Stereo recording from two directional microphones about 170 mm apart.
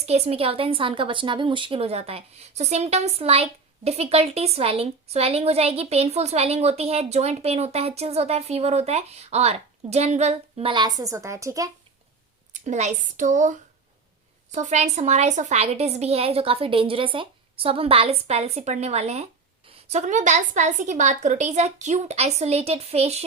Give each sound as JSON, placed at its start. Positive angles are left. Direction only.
{"t": 0.0, "sound": "a woman's voice", "side_deg": -40}
{"t": 12.5, "sound": "a woman's voice", "side_deg": -45}